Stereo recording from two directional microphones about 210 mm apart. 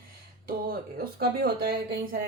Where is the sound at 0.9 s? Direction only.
50° right (ahead or behind).